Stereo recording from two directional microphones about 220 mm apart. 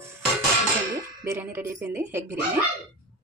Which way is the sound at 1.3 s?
10° right (ahead or behind).